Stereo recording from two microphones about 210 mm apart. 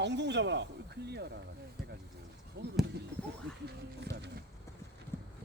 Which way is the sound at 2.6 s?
50° right (ahead or behind).